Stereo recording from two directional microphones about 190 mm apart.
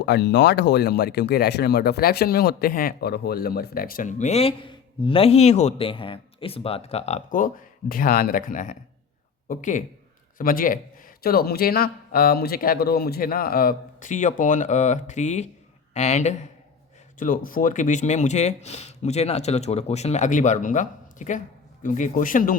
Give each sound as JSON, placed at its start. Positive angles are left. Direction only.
{"t": 0.0, "sound": "speech", "side_deg": 65}